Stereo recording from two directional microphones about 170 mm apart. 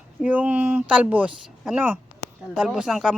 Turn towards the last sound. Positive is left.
turn(degrees=-5)  # may be behind; listen again after turning